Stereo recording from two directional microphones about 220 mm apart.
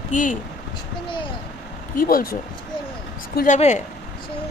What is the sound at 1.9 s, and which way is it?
Speech, 40° left (ahead or behind).